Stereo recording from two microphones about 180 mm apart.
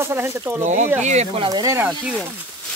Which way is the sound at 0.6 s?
40° right (ahead or behind).